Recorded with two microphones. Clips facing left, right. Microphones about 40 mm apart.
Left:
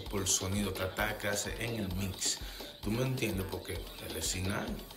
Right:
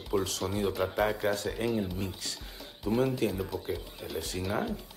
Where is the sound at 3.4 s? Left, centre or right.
Centre.